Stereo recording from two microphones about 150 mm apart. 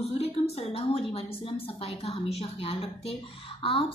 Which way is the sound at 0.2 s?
40° left (ahead or behind).